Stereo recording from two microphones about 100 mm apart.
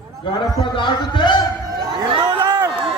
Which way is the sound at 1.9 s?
50° right (ahead or behind).